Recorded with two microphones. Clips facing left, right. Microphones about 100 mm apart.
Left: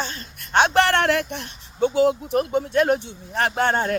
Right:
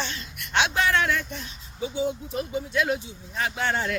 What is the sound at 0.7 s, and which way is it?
Speech, 65° left (ahead or behind).